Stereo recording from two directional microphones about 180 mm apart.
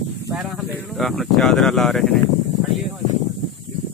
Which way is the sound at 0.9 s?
Centre (ahead or behind).